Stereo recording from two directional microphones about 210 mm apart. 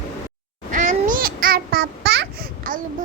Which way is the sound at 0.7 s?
35° right (ahead or behind).